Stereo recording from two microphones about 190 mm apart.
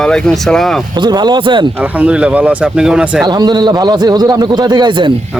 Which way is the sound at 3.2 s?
20° right (ahead or behind).